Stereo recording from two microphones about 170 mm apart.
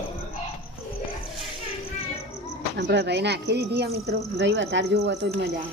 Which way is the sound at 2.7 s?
80° right.